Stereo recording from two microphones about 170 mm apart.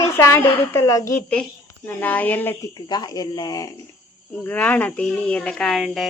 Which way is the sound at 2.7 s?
25° left (ahead or behind).